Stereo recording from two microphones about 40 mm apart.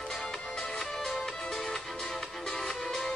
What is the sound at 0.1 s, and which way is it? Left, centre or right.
Music, centre.